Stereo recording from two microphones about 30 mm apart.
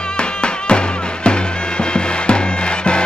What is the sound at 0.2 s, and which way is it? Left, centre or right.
Music, left.